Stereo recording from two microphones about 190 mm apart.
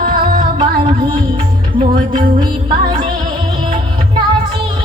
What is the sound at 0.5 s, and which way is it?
Music, 25° right (ahead or behind).